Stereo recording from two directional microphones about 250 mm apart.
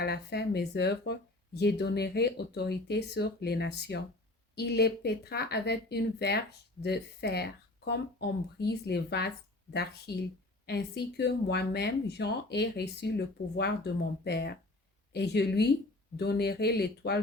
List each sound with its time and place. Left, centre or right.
0.0 s speech: left